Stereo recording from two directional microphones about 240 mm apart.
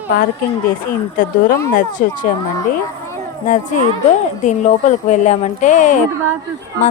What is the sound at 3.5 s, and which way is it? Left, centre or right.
Speech, left.